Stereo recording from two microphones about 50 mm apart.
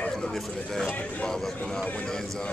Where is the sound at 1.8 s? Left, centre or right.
Left.